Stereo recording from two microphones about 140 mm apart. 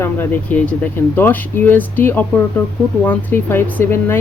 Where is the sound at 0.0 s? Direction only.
15° left (ahead or behind).